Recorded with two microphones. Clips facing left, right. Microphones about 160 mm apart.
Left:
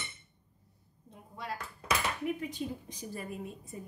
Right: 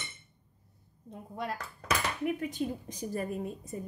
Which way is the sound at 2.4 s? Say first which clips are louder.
Right 4 dB; 50° right (ahead or behind).